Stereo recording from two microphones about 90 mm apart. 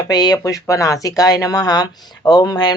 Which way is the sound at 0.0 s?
50° left (ahead or behind).